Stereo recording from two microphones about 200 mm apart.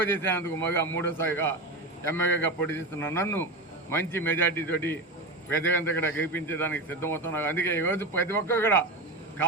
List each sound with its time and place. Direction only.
0.0 s a man's voice: 10° left (ahead or behind)